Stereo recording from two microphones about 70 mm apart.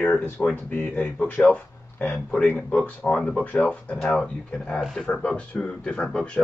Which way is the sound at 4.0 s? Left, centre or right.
Centre.